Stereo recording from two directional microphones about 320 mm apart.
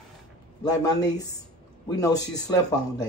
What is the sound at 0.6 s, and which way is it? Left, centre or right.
Speech, centre.